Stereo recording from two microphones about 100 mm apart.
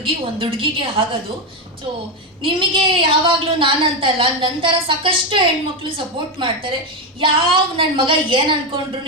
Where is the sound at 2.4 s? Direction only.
60° right (ahead or behind).